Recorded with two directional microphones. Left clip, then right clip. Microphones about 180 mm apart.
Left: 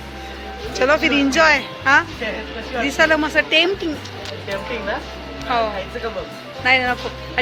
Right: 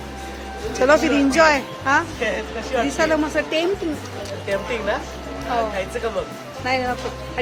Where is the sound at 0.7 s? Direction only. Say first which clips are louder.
Even; 10° right (ahead or behind).